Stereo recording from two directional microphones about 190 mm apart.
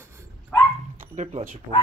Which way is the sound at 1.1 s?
35° right (ahead or behind).